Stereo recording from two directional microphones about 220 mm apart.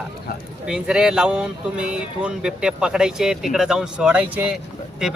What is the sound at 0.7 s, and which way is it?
Speech, 5° right (ahead or behind).